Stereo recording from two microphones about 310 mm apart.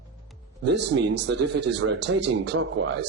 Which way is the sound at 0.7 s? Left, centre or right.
Right.